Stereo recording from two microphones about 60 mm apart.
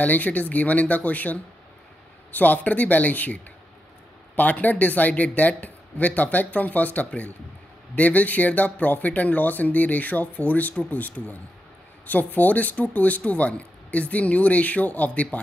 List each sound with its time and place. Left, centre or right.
0.0 s speech: left
4.4 s speech: left